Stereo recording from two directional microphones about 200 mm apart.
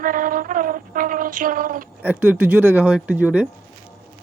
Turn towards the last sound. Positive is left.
turn(degrees=-5)  # may be behind; listen again after turning